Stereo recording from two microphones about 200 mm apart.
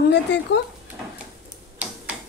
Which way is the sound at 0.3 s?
60° left (ahead or behind).